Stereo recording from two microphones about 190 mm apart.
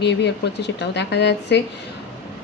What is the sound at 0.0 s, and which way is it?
A woman's voice, 65° left (ahead or behind).